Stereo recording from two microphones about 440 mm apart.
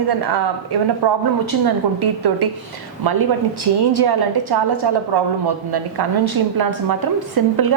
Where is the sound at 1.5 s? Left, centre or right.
Right.